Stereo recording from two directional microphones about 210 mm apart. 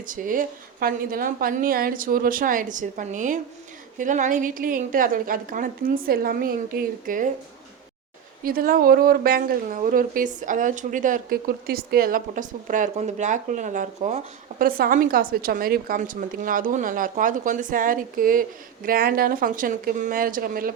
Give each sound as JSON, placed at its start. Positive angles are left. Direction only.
{"t": 0.1, "sound": "a woman's voice", "side_deg": -40}
{"t": 8.4, "sound": "a woman's voice", "side_deg": -45}